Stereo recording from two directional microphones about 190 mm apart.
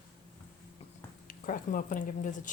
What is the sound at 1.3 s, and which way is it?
Speech, 45° left (ahead or behind).